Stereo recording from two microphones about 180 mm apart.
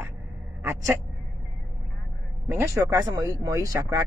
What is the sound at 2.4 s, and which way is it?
Speech, 15° right (ahead or behind).